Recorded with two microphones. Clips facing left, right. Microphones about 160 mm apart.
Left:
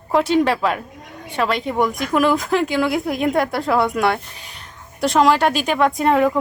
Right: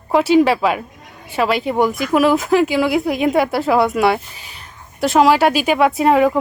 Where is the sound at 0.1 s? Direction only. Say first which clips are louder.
Right 4 dB; 5° right (ahead or behind).